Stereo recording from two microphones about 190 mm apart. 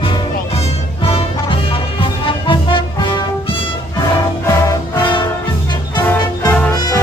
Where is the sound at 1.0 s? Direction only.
30° left (ahead or behind).